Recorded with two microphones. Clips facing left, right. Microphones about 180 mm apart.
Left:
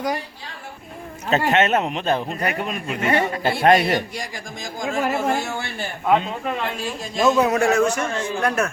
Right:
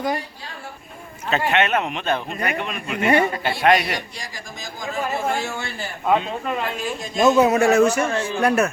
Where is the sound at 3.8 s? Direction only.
50° left (ahead or behind).